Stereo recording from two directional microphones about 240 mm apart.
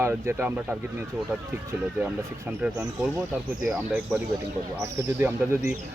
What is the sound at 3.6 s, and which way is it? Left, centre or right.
Speech, centre.